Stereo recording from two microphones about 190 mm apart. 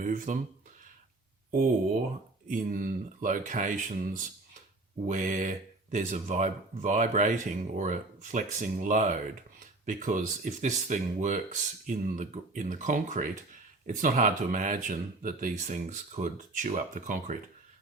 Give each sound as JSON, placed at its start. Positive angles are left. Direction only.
{"t": 0.0, "sound": "speech", "side_deg": -40}
{"t": 2.5, "sound": "speech", "side_deg": -45}